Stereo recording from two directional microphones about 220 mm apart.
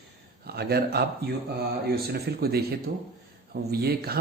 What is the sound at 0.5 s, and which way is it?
Speech, 45° right (ahead or behind).